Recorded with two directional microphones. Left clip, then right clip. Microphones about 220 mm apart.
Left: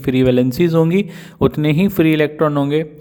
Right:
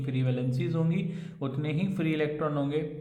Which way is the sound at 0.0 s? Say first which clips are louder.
Left 19 dB; 50° left (ahead or behind).